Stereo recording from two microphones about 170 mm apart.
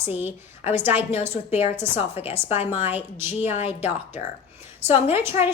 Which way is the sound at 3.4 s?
35° left (ahead or behind).